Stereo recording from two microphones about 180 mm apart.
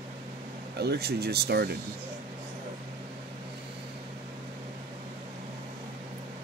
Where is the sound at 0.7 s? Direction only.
65° right (ahead or behind).